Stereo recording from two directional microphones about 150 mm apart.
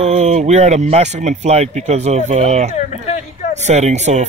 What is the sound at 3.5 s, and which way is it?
Speech, 50° right (ahead or behind).